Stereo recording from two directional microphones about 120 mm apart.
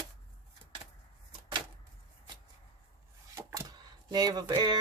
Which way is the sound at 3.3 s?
30° right (ahead or behind).